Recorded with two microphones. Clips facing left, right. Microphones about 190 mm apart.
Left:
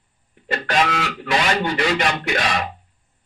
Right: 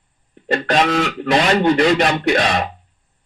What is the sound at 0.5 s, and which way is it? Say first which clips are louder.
Speech: right 4 dB; 35° right (ahead or behind).